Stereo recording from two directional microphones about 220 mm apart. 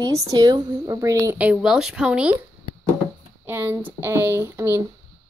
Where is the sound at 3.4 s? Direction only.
10° right (ahead or behind).